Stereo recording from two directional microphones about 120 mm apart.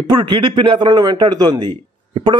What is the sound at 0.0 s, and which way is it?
A man's voice, 40° right (ahead or behind).